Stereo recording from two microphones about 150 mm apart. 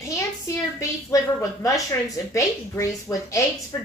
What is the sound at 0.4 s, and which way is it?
A woman's voice, 20° left (ahead or behind).